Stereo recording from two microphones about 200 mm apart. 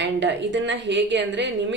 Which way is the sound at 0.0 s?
60° right (ahead or behind).